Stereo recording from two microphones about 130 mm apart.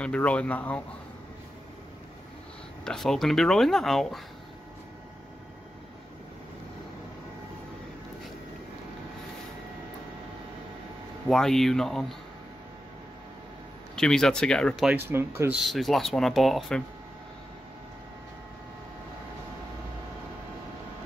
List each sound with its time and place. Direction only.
0.0 s speech: 10° left (ahead or behind)
2.8 s speech: 5° left (ahead or behind)
11.2 s speech: 5° left (ahead or behind)
13.9 s speech: 5° left (ahead or behind)
14.9 s speech: 15° right (ahead or behind)
15.5 s speech: centre (ahead or behind)